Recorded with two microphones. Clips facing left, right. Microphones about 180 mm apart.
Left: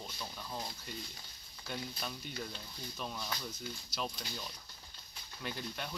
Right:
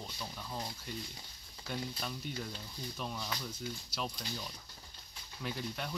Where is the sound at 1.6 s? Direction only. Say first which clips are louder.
Right 2 dB; centre (ahead or behind).